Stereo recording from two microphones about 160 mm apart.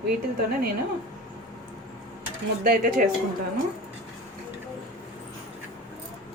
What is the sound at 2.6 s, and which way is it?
Speech, 65° right (ahead or behind).